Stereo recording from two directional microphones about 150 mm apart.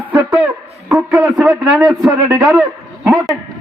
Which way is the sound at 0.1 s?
10° right (ahead or behind).